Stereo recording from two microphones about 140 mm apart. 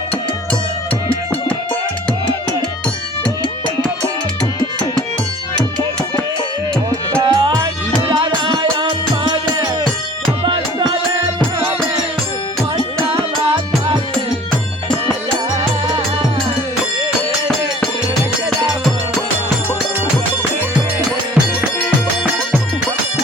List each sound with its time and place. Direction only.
7.2 s music: 30° right (ahead or behind)
21.8 s music: 10° left (ahead or behind)